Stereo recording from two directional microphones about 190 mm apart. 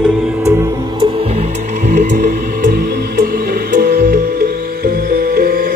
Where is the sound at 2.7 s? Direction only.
55° right (ahead or behind).